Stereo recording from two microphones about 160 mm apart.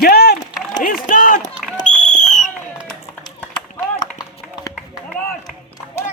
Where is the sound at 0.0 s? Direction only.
90° left.